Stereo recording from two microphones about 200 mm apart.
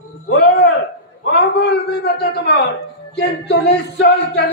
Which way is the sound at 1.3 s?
55° left (ahead or behind).